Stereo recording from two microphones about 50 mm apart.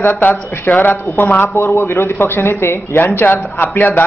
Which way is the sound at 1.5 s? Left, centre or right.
Left.